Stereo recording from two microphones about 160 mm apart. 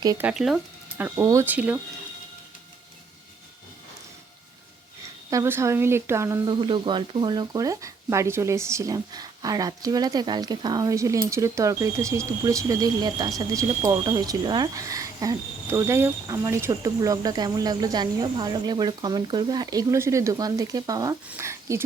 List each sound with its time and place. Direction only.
0.2 s speech: 5° right (ahead or behind)
5.3 s speech: 20° right (ahead or behind)
6.5 s speech: 30° right (ahead or behind)